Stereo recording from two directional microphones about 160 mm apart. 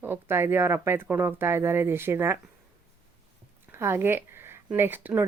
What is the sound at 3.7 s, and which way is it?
Speech, 15° right (ahead or behind).